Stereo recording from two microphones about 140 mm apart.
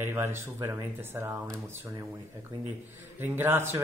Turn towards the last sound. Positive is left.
turn(degrees=-15)  # may be behind; listen again after turning